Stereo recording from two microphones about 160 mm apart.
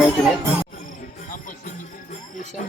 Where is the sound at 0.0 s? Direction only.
Centre (ahead or behind).